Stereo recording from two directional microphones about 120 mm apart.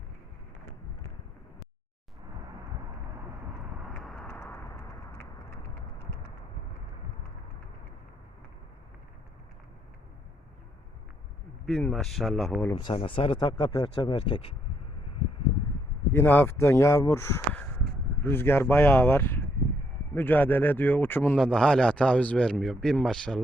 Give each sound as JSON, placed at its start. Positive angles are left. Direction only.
{"t": 4.0, "sound": "clip-clop", "side_deg": 0}
{"t": 4.3, "sound": "clip-clop", "side_deg": 15}
{"t": 11.8, "sound": "speech", "side_deg": 5}
{"t": 12.7, "sound": "speech", "side_deg": 45}
{"t": 16.1, "sound": "a man's voice", "side_deg": 15}
{"t": 21.3, "sound": "speech", "side_deg": 5}